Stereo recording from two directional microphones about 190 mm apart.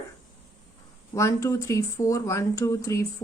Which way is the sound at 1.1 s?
15° left (ahead or behind).